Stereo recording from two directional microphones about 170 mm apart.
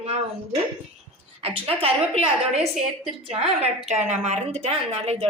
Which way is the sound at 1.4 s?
35° right (ahead or behind).